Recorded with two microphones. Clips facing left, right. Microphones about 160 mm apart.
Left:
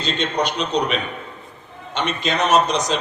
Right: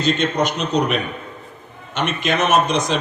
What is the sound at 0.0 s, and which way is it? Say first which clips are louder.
A man's voice: right 3 dB; 45° right (ahead or behind).